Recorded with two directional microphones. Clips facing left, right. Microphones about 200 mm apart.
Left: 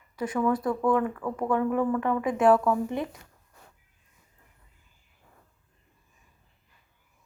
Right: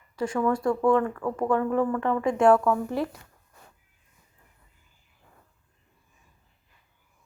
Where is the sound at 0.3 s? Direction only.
15° left (ahead or behind).